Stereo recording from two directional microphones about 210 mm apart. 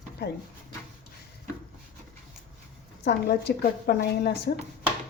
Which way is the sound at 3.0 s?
50° left (ahead or behind).